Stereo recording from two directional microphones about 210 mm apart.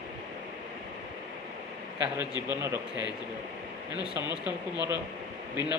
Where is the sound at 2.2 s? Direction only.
20° left (ahead or behind).